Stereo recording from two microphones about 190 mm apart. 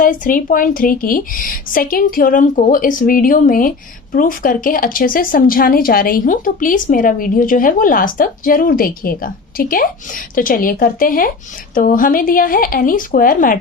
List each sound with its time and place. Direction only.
0.0 s a woman's voice: 45° left (ahead or behind)